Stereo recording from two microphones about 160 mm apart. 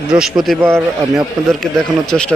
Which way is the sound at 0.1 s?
5° right (ahead or behind).